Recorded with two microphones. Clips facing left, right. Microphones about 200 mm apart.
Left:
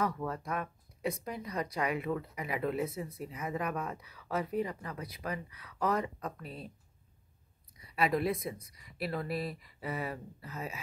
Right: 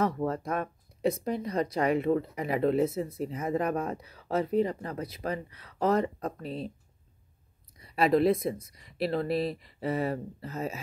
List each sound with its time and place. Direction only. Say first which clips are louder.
0.0 s speech: right 6 dB; 30° right (ahead or behind)
0.4 s speech: right 5 dB; 45° right (ahead or behind)
1.0 s speech: right 8 dB; 30° right (ahead or behind)
7.8 s a woman's voice: right 7 dB; 35° right (ahead or behind)